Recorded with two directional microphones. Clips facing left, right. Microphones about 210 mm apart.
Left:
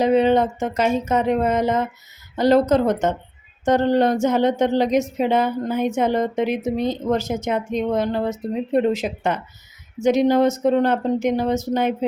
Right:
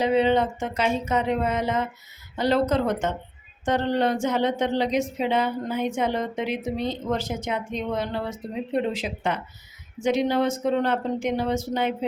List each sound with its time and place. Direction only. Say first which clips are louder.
0.0 s a woman's voice: left 4 dB; 45° left (ahead or behind)